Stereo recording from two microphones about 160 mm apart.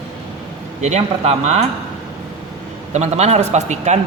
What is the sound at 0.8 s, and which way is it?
Speech, 45° right (ahead or behind).